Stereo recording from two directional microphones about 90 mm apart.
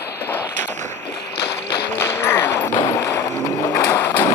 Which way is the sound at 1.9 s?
25° left (ahead or behind).